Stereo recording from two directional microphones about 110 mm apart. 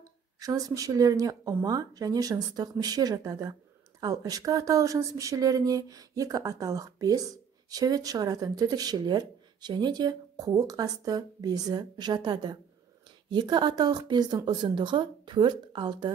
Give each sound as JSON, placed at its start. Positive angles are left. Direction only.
{"t": 0.4, "sound": "a woman's voice", "side_deg": -30}